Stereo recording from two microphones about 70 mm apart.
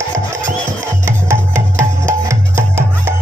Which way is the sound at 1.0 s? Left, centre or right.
Right.